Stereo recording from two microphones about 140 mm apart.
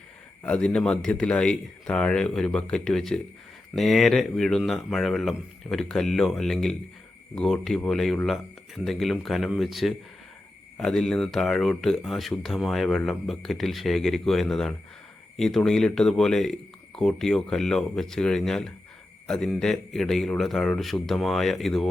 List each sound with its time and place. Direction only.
0.4 s speech: 5° left (ahead or behind)